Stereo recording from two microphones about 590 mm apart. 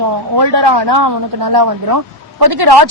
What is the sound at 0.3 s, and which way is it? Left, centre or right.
A man's voice, right.